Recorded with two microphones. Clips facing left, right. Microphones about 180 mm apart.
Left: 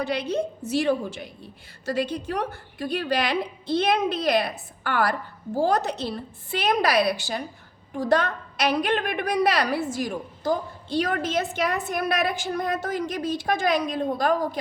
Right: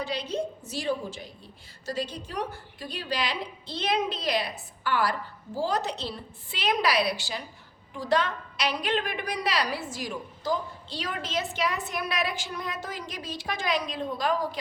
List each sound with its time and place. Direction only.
0.0 s a woman's voice: 60° left (ahead or behind)